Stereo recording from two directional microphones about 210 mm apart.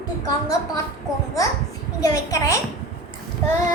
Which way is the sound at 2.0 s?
15° left (ahead or behind).